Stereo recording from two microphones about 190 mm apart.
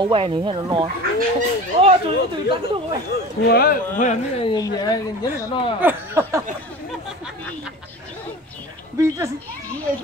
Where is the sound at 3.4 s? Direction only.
55° left (ahead or behind).